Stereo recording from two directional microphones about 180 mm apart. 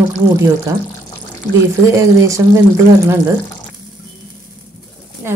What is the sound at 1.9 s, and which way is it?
Speech, 15° right (ahead or behind).